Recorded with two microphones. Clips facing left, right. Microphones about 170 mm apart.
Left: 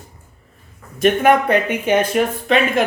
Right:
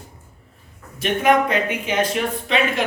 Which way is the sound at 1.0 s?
55° left (ahead or behind).